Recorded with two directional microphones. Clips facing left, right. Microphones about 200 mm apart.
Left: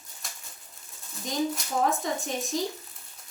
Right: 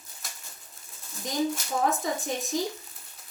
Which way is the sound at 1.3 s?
Centre (ahead or behind).